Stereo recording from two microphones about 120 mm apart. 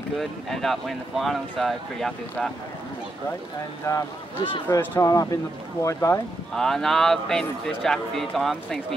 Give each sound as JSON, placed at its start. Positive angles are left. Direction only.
{"t": 0.2, "sound": "speech", "side_deg": 0}
{"t": 3.9, "sound": "speech", "side_deg": 25}
{"t": 6.5, "sound": "speech", "side_deg": 5}